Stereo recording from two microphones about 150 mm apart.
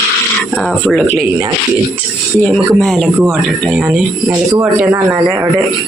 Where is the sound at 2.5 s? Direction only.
Centre (ahead or behind).